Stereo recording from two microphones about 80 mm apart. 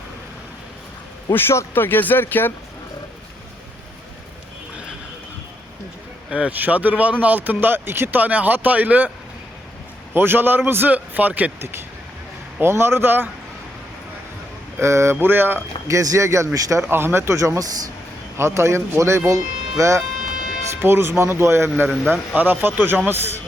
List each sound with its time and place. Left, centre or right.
1.3 s speech: left
6.3 s speech: centre
10.2 s speech: right
12.5 s speech: right
14.8 s speech: right
15.9 s speech: right
16.9 s speech: right
20.8 s speech: right
21.8 s a man's voice: centre
22.4 s speech: right